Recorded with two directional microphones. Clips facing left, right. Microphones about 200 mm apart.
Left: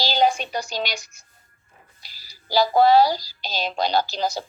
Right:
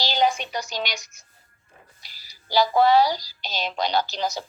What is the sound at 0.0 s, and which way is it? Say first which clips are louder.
Music: left 2 dB; 35° left (ahead or behind).